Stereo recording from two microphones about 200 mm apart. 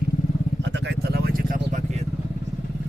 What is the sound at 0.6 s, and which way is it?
Vehicle, 60° right (ahead or behind).